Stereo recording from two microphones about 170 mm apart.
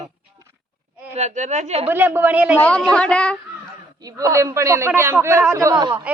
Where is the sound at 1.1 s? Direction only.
45° right (ahead or behind).